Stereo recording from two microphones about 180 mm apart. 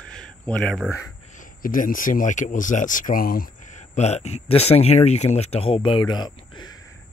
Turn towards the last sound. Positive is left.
turn(degrees=25)  # may be behind; listen again after turning